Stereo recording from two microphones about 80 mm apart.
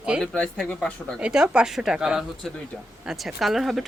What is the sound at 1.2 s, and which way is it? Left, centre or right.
Speech, centre.